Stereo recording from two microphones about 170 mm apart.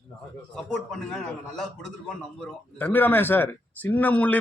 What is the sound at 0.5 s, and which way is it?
A man's voice, 5° left (ahead or behind).